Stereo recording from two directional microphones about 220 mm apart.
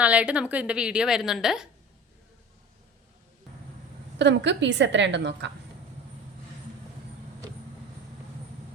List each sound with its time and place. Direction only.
0.0 s a woman's voice: 5° right (ahead or behind)
4.2 s a woman's voice: 50° right (ahead or behind)